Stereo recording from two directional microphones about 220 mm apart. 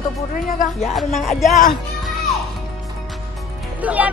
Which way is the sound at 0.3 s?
40° left (ahead or behind).